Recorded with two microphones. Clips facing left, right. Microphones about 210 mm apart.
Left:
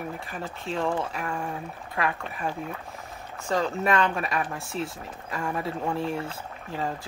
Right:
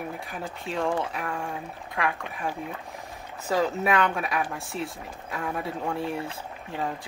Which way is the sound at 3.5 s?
5° right (ahead or behind).